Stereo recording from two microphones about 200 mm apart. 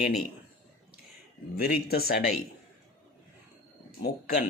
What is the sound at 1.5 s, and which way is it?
Speech, 50° left (ahead or behind).